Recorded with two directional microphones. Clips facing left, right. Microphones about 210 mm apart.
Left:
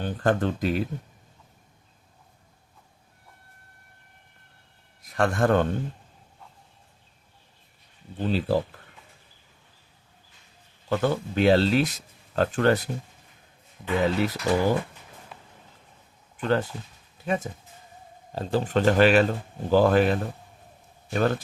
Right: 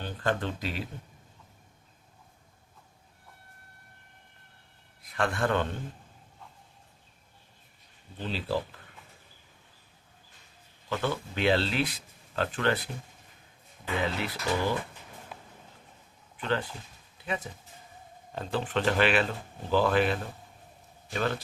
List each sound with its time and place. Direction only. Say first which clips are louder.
0.0 s speech: left 6 dB; 45° left (ahead or behind)
5.0 s a man's voice: left 6 dB; 45° left (ahead or behind)
8.2 s speech: left 7 dB; 45° left (ahead or behind)
10.8 s speech: left 6 dB; 45° left (ahead or behind)
14.0 s speech: left 8 dB; 45° left (ahead or behind)
15.3 s a sound: right 1 dB; centre (ahead or behind)
16.4 s speech: left 6 dB; 45° left (ahead or behind)
18.3 s speech: left 6 dB; 35° left (ahead or behind)